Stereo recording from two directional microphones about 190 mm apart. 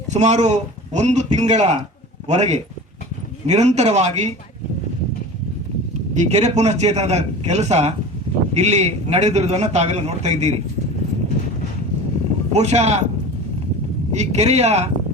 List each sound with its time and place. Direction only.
0.1 s a man's voice: 35° right (ahead or behind)
6.1 s a man's voice: 35° right (ahead or behind)
12.5 s a man's voice: 35° right (ahead or behind)
14.1 s a man's voice: 35° right (ahead or behind)